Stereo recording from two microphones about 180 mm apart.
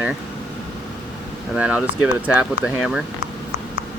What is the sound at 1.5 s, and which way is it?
Speech, 5° right (ahead or behind).